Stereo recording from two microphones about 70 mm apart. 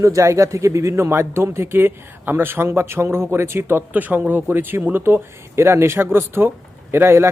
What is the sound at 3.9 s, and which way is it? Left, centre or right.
A man's voice, right.